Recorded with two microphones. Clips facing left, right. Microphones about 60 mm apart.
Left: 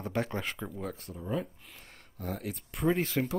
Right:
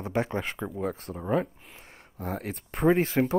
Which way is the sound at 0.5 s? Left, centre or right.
Right.